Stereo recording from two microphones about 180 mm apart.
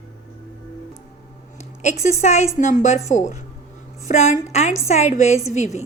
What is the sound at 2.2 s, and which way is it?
A woman's voice, 40° left (ahead or behind).